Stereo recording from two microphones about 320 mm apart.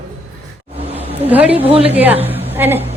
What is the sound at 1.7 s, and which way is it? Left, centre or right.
Speech, centre.